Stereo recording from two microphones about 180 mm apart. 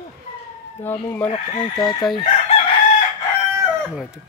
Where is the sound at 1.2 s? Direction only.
30° left (ahead or behind).